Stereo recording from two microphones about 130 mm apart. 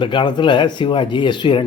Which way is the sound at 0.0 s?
40° left (ahead or behind).